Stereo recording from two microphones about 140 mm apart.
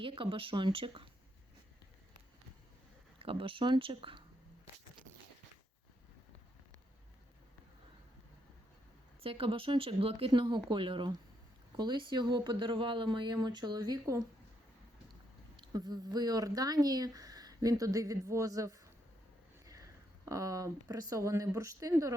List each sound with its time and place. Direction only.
0.0 s speech: 40° right (ahead or behind)
3.2 s speech: 40° right (ahead or behind)
9.2 s speech: 40° right (ahead or behind)
15.5 s speech: 30° right (ahead or behind)
20.2 s speech: 25° right (ahead or behind)